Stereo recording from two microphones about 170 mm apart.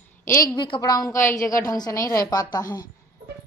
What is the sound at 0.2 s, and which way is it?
A woman's voice, 15° left (ahead or behind).